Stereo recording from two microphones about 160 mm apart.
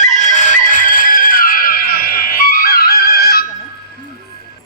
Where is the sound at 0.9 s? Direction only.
60° left (ahead or behind); by 3.4 s 75° left (ahead or behind).